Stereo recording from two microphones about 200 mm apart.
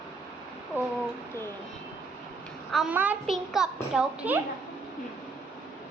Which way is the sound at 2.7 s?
5° right (ahead or behind).